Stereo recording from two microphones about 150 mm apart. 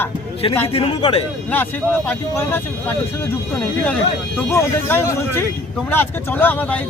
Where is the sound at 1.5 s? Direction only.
15° left (ahead or behind).